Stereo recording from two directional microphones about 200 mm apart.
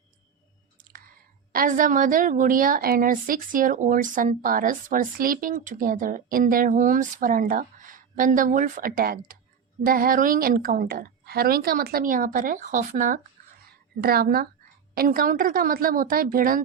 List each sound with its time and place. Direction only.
1.5 s a woman's voice: 45° right (ahead or behind)
14.0 s a woman's voice: 50° right (ahead or behind)